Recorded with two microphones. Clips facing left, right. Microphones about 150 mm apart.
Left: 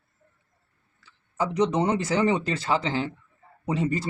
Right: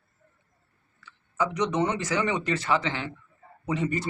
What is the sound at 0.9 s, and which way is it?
Speech, 30° left (ahead or behind).